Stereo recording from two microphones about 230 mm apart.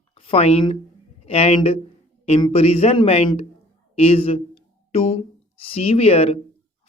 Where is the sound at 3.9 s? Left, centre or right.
Left.